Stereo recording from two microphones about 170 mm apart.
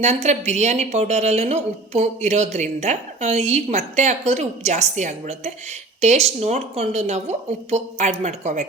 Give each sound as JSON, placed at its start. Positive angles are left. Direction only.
{"t": 0.0, "sound": "speech", "side_deg": -40}